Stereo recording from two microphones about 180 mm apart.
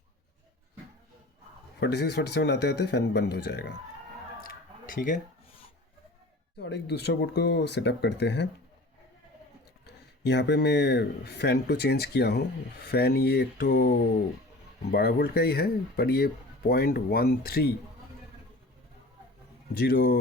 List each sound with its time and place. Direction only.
1.8 s speech: 70° left (ahead or behind)
4.9 s speech: 50° left (ahead or behind)
6.6 s speech: 70° left (ahead or behind)
9.8 s speech: 70° left (ahead or behind)
19.8 s speech: 60° left (ahead or behind)